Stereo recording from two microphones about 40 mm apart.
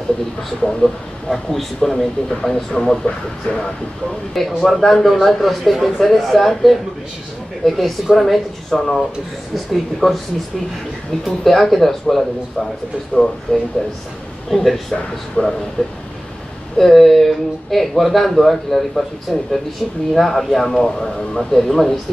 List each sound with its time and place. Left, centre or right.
0.6 s speech: centre
1.3 s speech: centre
4.3 s speech: centre
11.2 s speech: centre
15.4 s speech: left
15.8 s speech: centre
20.7 s speech: centre